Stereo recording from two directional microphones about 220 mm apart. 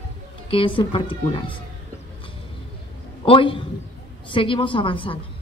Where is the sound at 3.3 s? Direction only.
25° left (ahead or behind).